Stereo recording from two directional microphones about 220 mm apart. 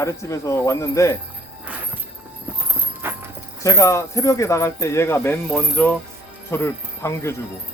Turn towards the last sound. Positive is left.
turn(degrees=10)  # may be behind; listen again after turning